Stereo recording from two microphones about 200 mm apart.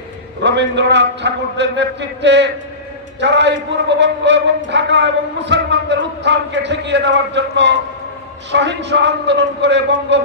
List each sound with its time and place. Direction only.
0.4 s a man's voice: 60° right (ahead or behind)